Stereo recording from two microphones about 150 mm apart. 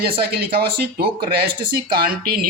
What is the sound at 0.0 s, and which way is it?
Speech, 90° right.